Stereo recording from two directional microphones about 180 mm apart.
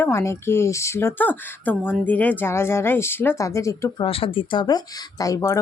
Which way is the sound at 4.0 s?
30° left (ahead or behind).